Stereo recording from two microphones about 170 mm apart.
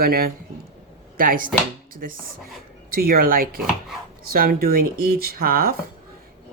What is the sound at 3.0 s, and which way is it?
Speech, 60° right (ahead or behind).